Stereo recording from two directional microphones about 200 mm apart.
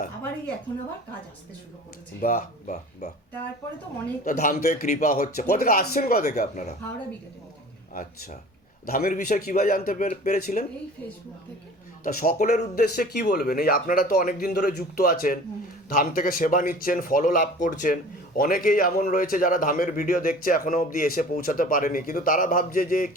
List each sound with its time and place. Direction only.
2.2 s speech: 40° left (ahead or behind)
4.2 s speech: 40° left (ahead or behind)
8.9 s speech: 45° left (ahead or behind)
12.0 s speech: 40° left (ahead or behind)